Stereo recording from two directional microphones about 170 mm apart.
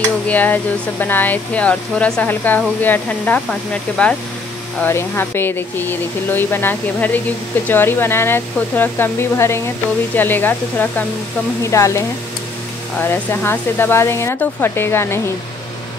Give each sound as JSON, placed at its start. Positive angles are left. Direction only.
{"t": 0.3, "sound": "speech", "side_deg": 10}
{"t": 13.0, "sound": "speech", "side_deg": 15}